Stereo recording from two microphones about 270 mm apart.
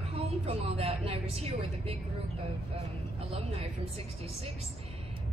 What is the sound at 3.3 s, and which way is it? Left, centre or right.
Speech, right.